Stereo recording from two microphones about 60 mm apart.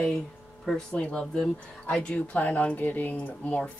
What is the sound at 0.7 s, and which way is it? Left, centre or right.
Speech, centre.